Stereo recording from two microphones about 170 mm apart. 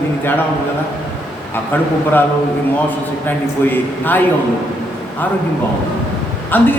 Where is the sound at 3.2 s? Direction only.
10° left (ahead or behind).